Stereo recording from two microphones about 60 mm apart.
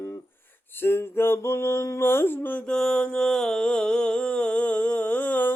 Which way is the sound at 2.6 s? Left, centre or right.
Centre.